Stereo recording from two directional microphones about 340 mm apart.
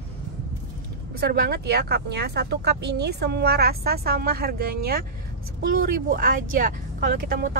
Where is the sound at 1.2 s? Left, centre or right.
Right.